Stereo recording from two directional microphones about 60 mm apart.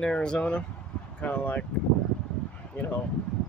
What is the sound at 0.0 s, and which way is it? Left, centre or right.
Speech, centre.